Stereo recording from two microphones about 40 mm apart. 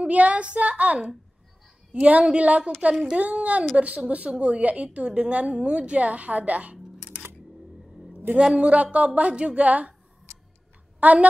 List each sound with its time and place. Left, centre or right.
0.0 s a woman's voice: right
8.4 s a woman's voice: right
9.3 s speech: right
9.6 s a woman's voice: right
11.0 s a woman's voice: right